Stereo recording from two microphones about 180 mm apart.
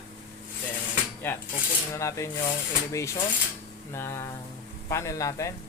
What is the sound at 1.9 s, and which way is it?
Speech, 15° left (ahead or behind).